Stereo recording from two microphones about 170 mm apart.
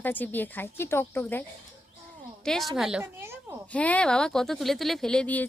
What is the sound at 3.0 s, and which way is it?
Speech, 15° right (ahead or behind).